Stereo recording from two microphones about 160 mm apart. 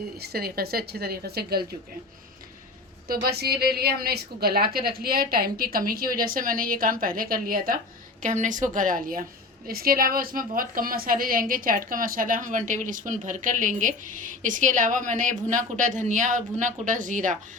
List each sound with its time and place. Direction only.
0.2 s a woman's voice: 80° right
3.1 s a woman's voice: 80° right
8.2 s a woman's voice: 50° right (ahead or behind)